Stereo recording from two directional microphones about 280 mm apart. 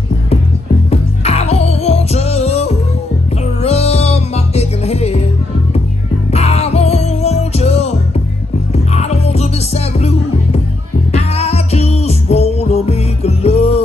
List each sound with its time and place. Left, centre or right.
0.8 s music: left
6.3 s music: left
8.9 s music: left